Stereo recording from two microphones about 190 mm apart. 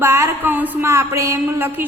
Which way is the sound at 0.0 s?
15° right (ahead or behind).